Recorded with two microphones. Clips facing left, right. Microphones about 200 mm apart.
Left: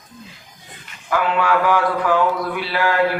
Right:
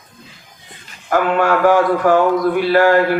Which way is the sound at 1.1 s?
45° right (ahead or behind).